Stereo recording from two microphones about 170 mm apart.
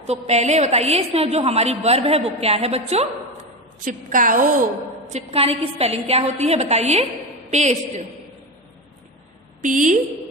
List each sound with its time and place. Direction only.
0.1 s a woman's voice: 40° right (ahead or behind)
3.8 s a woman's voice: 50° right (ahead or behind)
5.1 s a woman's voice: 35° right (ahead or behind)
9.6 s a woman's voice: 50° right (ahead or behind)